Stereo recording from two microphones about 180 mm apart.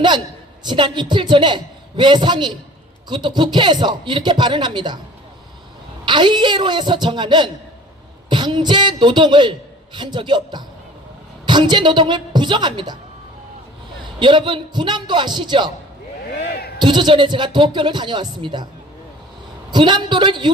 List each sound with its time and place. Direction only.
0.6 s a woman's voice: 25° right (ahead or behind)
6.1 s a woman's voice: 25° right (ahead or behind)
14.0 s a woman's voice: 25° right (ahead or behind)
16.5 s a sound: 60° left (ahead or behind)
16.7 s a woman's voice: 25° right (ahead or behind)
19.7 s a woman's voice: 25° right (ahead or behind)